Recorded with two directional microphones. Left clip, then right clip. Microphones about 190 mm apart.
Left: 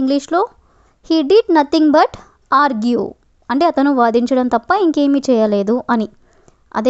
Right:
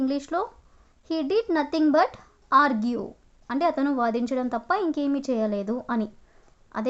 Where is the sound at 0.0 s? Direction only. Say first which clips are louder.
Left 11 dB; 45° left (ahead or behind).